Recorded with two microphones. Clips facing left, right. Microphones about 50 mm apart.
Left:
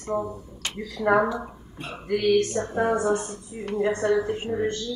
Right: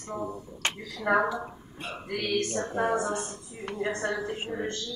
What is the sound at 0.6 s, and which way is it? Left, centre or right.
Speech, right.